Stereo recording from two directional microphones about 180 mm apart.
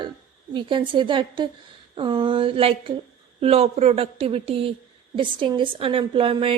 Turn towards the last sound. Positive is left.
turn(degrees=-30)  # may be behind; listen again after turning